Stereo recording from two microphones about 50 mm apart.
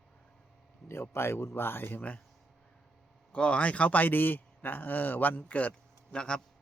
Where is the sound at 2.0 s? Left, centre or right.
Left.